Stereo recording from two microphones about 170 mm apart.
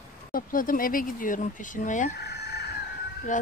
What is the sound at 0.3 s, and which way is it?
Speech, 55° left (ahead or behind).